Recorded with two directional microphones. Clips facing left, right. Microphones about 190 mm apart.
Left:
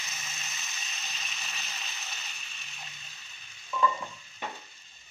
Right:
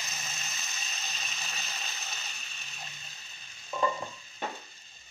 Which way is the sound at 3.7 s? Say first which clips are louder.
Left 2 dB; 40° right (ahead or behind).